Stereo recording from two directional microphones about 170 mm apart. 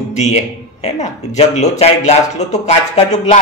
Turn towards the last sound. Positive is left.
turn(degrees=40)  # may be behind; listen again after turning